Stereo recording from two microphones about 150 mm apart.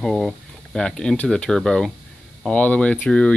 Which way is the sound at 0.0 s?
Centre (ahead or behind).